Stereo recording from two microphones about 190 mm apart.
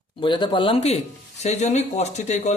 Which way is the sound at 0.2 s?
25° left (ahead or behind).